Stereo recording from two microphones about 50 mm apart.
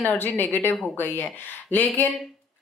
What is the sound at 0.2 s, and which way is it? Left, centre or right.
A woman's voice, left.